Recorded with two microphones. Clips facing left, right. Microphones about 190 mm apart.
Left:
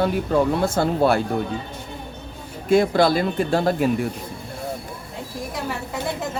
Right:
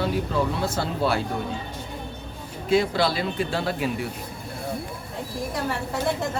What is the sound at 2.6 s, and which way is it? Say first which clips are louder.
Speech: left 5 dB; 50° left (ahead or behind).